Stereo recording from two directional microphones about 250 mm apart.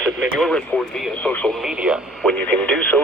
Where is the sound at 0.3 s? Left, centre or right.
Centre.